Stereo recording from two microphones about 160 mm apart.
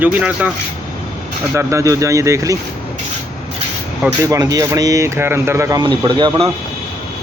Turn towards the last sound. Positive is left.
turn(degrees=-30)  # may be behind; listen again after turning